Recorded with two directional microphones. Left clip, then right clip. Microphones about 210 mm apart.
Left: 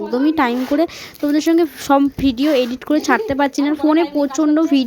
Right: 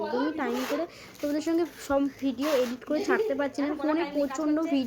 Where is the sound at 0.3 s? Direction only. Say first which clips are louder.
Left 13 dB; 50° left (ahead or behind).